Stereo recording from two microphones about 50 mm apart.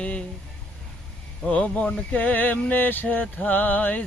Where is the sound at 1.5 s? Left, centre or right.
Left.